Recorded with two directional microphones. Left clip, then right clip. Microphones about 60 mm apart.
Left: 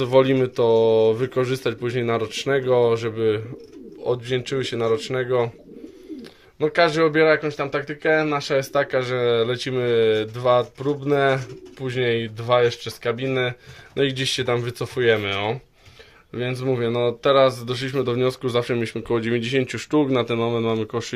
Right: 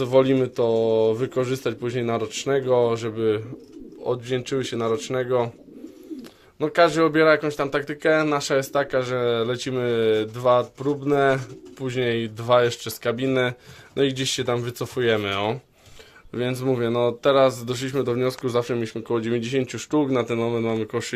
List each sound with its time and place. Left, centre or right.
0.0 s speech: centre
6.7 s a man's voice: right
7.3 s speech: right
8.7 s speech: centre
11.8 s a man's voice: right
12.6 s speech: right
13.9 s speech: centre
15.2 s speech: right
16.7 s a man's voice: right
18.1 s speech: centre
18.8 s speech: centre
19.2 s speech: centre